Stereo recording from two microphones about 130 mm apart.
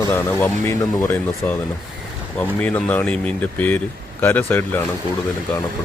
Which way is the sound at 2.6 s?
10° left (ahead or behind).